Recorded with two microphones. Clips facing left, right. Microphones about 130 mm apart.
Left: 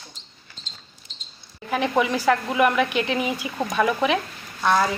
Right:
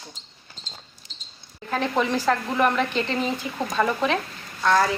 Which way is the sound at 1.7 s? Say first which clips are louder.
Left 2 dB; 10° left (ahead or behind).